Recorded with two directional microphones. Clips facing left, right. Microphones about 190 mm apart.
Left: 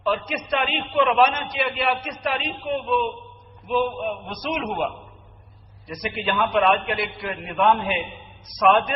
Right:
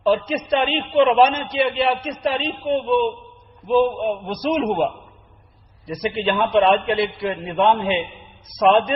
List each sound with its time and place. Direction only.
0.0 s a man's voice: 30° right (ahead or behind)
5.9 s a man's voice: 30° right (ahead or behind)